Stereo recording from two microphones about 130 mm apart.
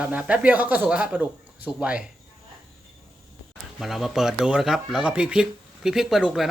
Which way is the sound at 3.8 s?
Centre (ahead or behind).